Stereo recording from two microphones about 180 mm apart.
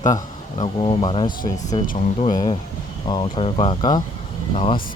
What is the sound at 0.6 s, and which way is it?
Speech, 30° left (ahead or behind).